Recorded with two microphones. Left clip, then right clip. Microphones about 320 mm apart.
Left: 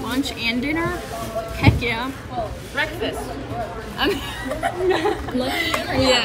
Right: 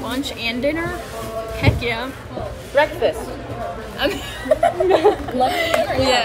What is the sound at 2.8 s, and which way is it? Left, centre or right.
Speech, right.